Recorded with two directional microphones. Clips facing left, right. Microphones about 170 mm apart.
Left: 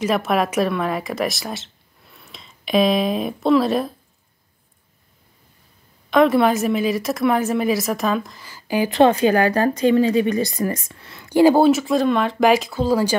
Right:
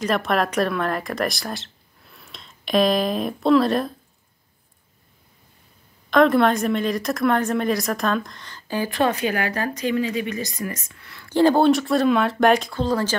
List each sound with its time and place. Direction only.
0.0 s speech: centre (ahead or behind)
6.0 s a woman's voice: centre (ahead or behind)